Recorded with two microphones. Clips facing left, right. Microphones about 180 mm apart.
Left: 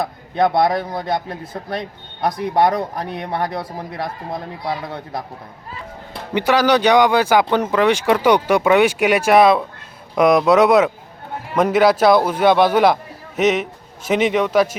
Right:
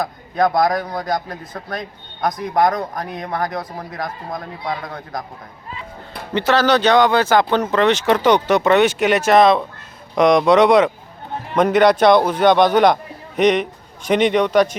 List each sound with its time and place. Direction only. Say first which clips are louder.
0.0 s speech: even; 25° left (ahead or behind)
4.6 s a man's voice: left 1 dB; 5° left (ahead or behind)
4.9 s speech: left 1 dB; 30° left (ahead or behind)
6.3 s a man's voice: even; 15° left (ahead or behind)